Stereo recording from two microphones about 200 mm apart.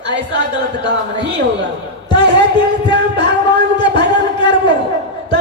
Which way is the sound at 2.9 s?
60° right (ahead or behind).